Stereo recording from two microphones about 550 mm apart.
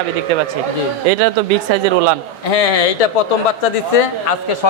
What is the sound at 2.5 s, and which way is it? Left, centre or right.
Speech, left.